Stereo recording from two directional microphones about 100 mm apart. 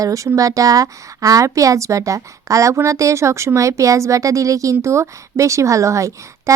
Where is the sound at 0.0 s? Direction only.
35° right (ahead or behind).